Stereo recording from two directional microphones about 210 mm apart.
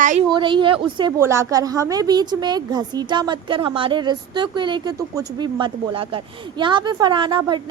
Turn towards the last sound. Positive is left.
turn(degrees=-25)  # may be behind; listen again after turning